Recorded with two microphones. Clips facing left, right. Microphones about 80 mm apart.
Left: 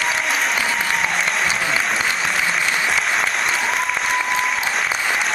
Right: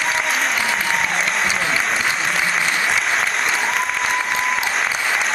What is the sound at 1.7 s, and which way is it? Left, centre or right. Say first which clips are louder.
Applause: even; centre.